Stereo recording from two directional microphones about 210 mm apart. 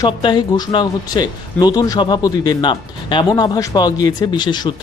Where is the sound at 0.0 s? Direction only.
20° left (ahead or behind).